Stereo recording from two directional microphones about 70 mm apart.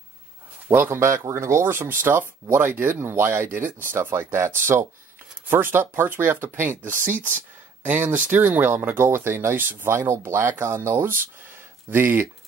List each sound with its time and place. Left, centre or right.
0.7 s speech: right
9.9 s speech: right